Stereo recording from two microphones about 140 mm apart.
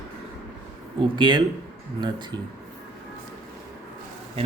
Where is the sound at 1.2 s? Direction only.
35° right (ahead or behind).